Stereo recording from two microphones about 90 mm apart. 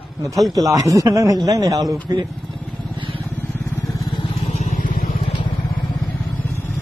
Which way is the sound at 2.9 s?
70° right (ahead or behind).